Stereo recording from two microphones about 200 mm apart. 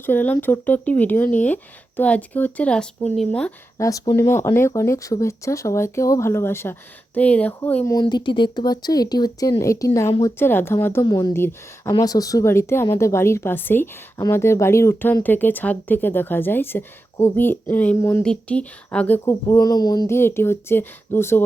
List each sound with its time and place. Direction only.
0.0 s speech: 10° left (ahead or behind)
3.8 s speech: 15° left (ahead or behind)
7.9 s speech: 25° left (ahead or behind)
10.3 s speech: 10° left (ahead or behind)